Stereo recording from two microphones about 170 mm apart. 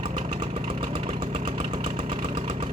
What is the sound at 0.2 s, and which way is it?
Engine, 35° right (ahead or behind).